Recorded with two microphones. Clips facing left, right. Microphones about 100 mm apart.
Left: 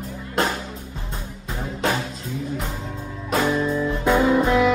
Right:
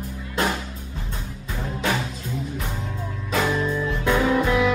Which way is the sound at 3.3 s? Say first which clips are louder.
Left 2 dB; 15° left (ahead or behind).